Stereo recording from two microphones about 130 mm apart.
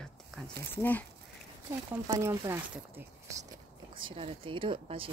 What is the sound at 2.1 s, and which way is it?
Speech, 20° right (ahead or behind).